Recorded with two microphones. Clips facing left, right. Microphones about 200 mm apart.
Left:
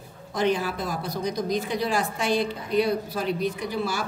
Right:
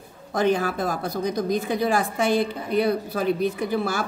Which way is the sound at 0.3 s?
50° right (ahead or behind).